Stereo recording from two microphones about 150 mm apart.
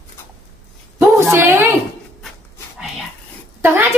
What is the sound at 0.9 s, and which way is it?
Speech, 15° right (ahead or behind).